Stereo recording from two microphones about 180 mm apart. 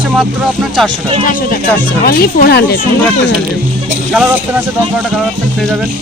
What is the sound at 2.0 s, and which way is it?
Speech, 55° left (ahead or behind).